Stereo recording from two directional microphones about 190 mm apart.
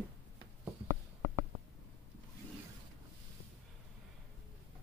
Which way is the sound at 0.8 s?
45° right (ahead or behind).